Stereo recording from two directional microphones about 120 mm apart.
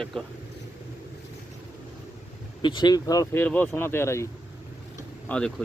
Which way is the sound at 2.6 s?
40° left (ahead or behind).